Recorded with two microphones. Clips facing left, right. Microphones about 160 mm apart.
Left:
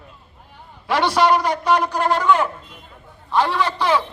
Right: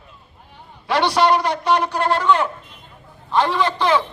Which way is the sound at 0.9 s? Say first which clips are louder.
Even; 10° left (ahead or behind).